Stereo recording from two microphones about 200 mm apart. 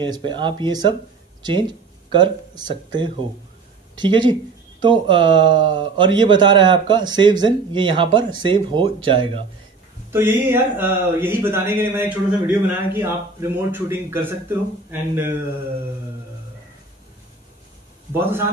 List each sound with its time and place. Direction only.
0.0 s speech: 25° right (ahead or behind)
2.1 s speech: 25° right (ahead or behind)
10.1 s speech: 10° right (ahead or behind)
18.1 s speech: 10° right (ahead or behind)